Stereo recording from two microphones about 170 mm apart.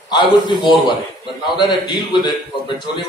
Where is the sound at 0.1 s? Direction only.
25° left (ahead or behind).